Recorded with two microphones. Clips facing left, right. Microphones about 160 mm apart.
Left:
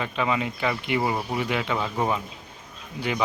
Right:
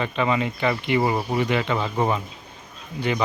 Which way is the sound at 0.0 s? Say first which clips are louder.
Right 3 dB; 5° left (ahead or behind).